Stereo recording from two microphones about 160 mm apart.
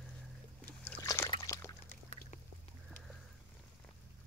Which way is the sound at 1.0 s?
20° left (ahead or behind).